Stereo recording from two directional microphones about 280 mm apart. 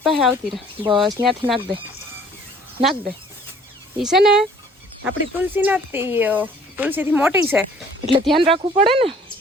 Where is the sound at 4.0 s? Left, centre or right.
Centre.